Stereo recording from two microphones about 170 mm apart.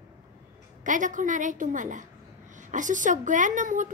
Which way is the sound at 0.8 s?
50° right (ahead or behind).